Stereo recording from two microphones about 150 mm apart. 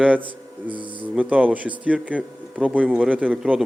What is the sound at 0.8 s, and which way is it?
Speech, 35° right (ahead or behind).